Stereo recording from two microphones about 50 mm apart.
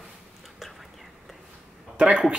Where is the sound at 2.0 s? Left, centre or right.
Centre.